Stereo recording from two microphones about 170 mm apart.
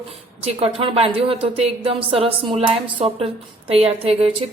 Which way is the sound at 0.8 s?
35° right (ahead or behind).